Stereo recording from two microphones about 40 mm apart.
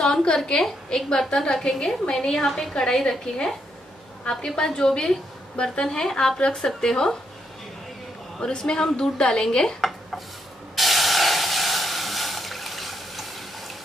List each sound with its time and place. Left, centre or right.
0.0 s a woman's voice: centre
4.6 s a woman's voice: centre
8.4 s speech: left
9.8 s dishes: centre
10.8 s a sound: centre